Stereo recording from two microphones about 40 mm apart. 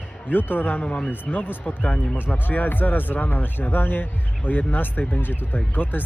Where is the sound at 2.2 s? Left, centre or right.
Left.